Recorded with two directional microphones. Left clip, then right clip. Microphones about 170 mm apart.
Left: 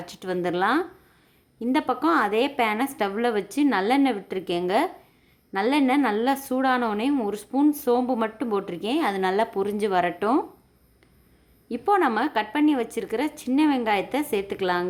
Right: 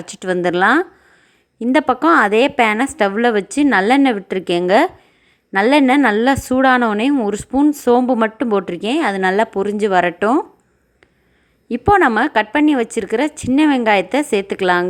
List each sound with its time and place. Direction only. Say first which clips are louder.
0.0 s a woman's voice: right 9 dB; 35° right (ahead or behind)
11.7 s a woman's voice: right 9 dB; 35° right (ahead or behind)